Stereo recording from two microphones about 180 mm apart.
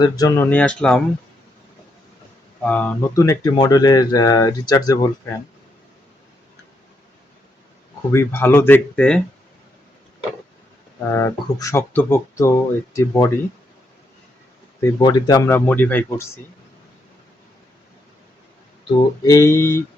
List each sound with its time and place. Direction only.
0.0 s speech: 20° left (ahead or behind)
2.6 s speech: 5° left (ahead or behind)
8.1 s speech: 15° left (ahead or behind)
11.1 s speech: 15° left (ahead or behind)
14.8 s speech: 20° left (ahead or behind)
18.9 s speech: 20° left (ahead or behind)